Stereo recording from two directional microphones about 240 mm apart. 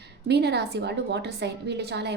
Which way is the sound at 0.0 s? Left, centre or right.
Right.